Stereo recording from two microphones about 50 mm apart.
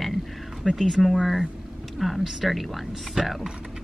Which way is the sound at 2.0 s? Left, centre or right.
Centre.